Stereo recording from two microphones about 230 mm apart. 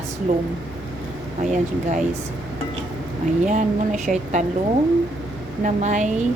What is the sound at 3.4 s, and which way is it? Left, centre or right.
Speech, right.